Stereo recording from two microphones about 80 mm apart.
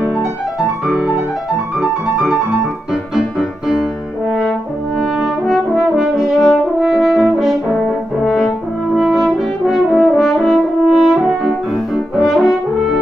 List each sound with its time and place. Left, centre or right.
0.8 s music: centre
2.9 s music: centre
4.3 s french horn: centre